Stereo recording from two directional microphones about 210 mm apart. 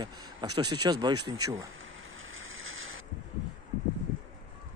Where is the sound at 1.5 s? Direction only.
70° right (ahead or behind).